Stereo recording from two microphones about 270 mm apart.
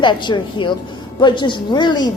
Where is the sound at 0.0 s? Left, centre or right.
Centre.